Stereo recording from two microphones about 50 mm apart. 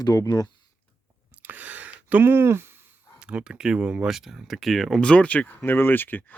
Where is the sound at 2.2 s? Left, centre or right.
Right.